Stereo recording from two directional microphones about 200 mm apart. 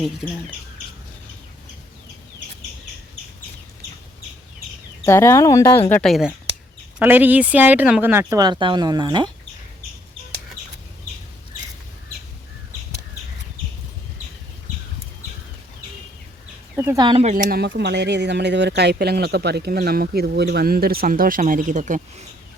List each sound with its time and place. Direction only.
5.0 s speech: 15° left (ahead or behind)
5.9 s speech: centre (ahead or behind); by 9.3 s 20° right (ahead or behind)
16.7 s speech: 15° right (ahead or behind)
17.2 s speech: 45° right (ahead or behind)
17.7 s speech: 55° right (ahead or behind); by 22.0 s 40° right (ahead or behind)